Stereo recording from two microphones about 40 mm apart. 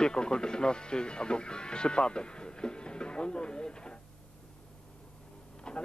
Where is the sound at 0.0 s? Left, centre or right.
Centre.